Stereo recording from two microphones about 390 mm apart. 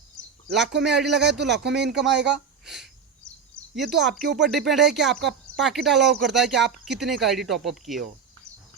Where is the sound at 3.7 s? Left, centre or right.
Centre.